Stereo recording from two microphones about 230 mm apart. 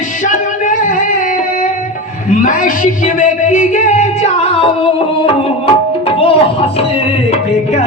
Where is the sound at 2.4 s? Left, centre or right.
Left.